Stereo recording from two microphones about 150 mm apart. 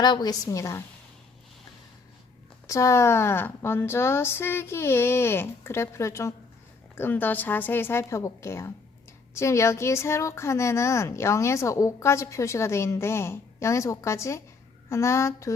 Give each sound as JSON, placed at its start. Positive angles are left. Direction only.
{"t": 0.0, "sound": "a woman's voice", "side_deg": 30}
{"t": 2.6, "sound": "a woman's voice", "side_deg": 20}